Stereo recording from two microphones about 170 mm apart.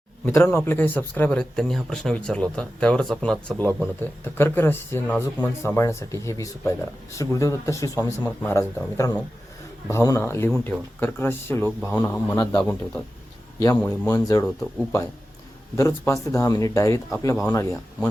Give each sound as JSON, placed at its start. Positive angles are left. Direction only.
{"t": 0.3, "sound": "speech", "side_deg": 15}
{"t": 13.8, "sound": "speech", "side_deg": 15}
{"t": 15.7, "sound": "speech", "side_deg": 20}